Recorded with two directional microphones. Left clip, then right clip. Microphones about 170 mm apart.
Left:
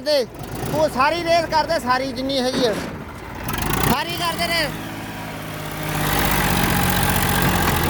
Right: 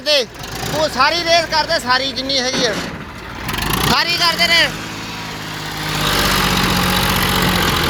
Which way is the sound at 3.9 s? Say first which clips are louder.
Right 7 dB; 30° left (ahead or behind).